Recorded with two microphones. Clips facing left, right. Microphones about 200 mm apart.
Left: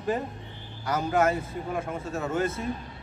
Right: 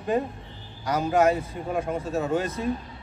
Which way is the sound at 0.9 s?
15° right (ahead or behind).